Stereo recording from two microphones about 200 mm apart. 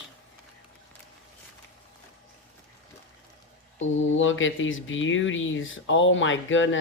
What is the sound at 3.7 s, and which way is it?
Speech, 75° left (ahead or behind).